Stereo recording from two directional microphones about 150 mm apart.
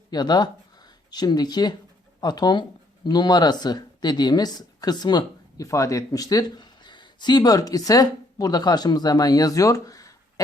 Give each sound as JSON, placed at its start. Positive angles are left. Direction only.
{"t": 0.1, "sound": "speech", "side_deg": 30}